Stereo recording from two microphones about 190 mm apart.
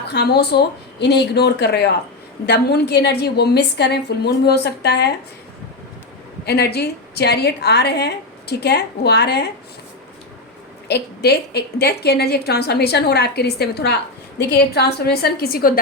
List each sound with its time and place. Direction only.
0.1 s a woman's voice: 60° left (ahead or behind)
6.4 s a woman's voice: 60° left (ahead or behind)
10.8 s a woman's voice: 60° left (ahead or behind)